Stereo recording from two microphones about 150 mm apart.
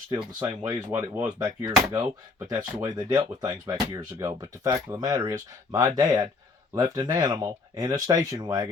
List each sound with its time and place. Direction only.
0.1 s speech: 30° right (ahead or behind)
0.7 s speech: 15° right (ahead or behind)